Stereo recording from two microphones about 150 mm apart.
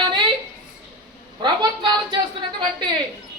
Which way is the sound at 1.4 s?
30° right (ahead or behind).